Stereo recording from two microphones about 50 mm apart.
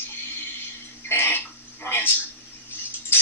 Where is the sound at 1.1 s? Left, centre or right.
Left.